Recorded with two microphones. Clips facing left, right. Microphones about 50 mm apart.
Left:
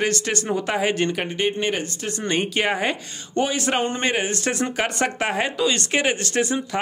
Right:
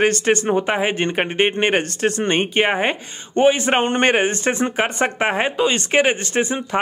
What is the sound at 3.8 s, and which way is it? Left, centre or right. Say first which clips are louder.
Speech: right 6 dB; right.